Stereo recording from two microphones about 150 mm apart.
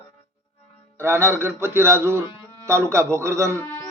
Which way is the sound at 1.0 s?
15° right (ahead or behind).